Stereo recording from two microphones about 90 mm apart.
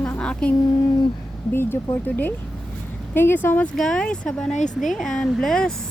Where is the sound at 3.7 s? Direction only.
5° left (ahead or behind).